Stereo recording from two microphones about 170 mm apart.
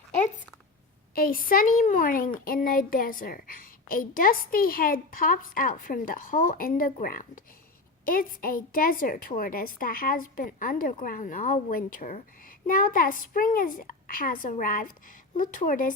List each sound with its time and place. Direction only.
1.1 s a woman's voice: 55° left (ahead or behind)